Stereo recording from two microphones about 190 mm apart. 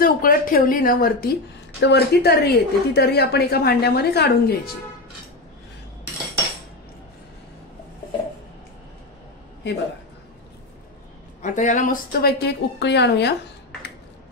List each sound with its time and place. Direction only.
0.0 s speech: 50° left (ahead or behind)
1.8 s speech: 60° left (ahead or behind)
11.4 s speech: 40° left (ahead or behind)
12.1 s speech: 55° left (ahead or behind)